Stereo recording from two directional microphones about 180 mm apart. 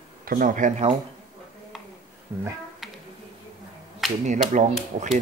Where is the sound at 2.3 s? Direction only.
15° right (ahead or behind).